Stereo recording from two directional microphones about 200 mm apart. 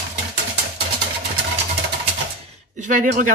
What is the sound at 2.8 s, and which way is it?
Speech, 40° right (ahead or behind).